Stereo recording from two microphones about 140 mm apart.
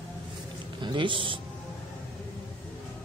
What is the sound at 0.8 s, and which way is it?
Speech, 35° right (ahead or behind).